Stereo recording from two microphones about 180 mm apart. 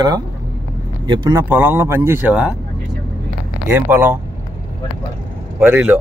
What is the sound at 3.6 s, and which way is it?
Speech, 10° right (ahead or behind).